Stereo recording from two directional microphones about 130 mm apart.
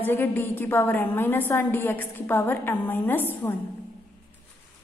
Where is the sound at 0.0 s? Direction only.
15° left (ahead or behind).